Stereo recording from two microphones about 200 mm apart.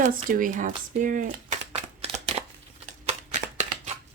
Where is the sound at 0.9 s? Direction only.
40° right (ahead or behind).